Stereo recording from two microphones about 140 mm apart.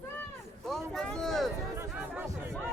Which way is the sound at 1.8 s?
10° right (ahead or behind).